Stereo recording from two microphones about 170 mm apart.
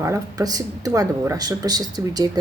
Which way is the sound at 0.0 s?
20° right (ahead or behind).